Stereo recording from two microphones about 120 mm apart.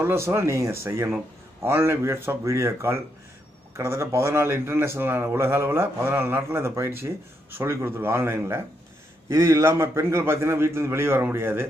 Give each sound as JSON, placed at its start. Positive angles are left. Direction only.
{"t": 0.0, "sound": "a man's voice", "side_deg": -20}